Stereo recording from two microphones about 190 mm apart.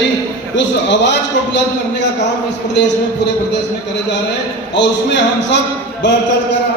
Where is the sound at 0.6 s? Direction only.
70° left (ahead or behind).